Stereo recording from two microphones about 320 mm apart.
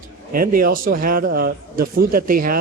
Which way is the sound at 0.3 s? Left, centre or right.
Right.